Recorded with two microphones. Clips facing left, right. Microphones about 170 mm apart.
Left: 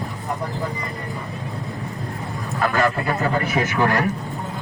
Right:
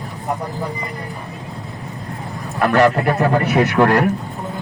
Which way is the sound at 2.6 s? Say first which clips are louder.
Right 7 dB; 70° right (ahead or behind).